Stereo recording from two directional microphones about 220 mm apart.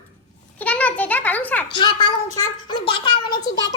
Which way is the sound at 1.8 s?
20° left (ahead or behind).